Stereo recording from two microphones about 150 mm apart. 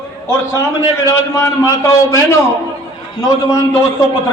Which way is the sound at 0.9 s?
20° left (ahead or behind).